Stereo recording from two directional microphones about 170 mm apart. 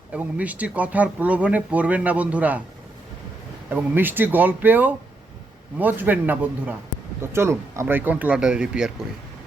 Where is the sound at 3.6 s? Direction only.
10° right (ahead or behind).